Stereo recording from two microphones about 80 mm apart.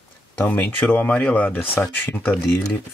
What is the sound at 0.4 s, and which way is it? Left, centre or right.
Speech, left.